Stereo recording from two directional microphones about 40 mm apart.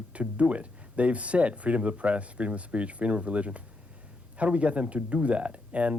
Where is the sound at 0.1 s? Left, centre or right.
Right.